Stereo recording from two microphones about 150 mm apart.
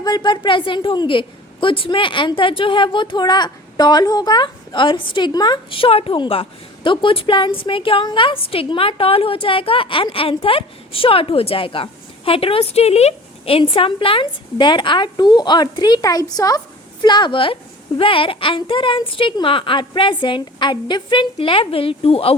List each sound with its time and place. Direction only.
0.0 s a woman's voice: 30° left (ahead or behind)